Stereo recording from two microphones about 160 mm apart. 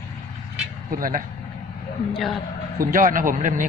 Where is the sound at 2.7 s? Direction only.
60° right (ahead or behind).